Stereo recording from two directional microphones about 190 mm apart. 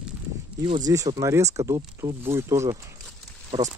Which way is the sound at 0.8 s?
15° right (ahead or behind).